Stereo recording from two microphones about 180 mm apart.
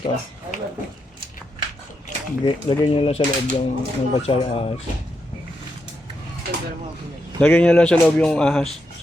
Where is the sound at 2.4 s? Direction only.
30° left (ahead or behind).